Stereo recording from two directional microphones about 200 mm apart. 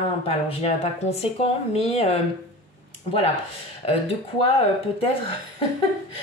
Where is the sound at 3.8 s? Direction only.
30° left (ahead or behind).